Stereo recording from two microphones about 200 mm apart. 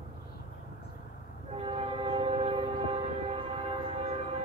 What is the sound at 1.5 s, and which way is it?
Train, 30° right (ahead or behind).